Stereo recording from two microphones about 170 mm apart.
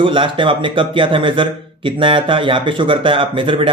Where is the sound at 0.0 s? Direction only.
30° right (ahead or behind).